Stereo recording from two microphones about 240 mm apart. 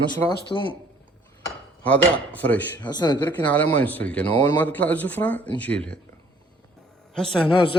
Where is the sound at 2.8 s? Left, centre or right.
Centre.